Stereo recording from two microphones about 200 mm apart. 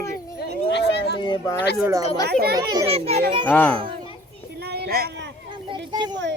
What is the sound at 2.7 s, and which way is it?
Speech, 15° right (ahead or behind).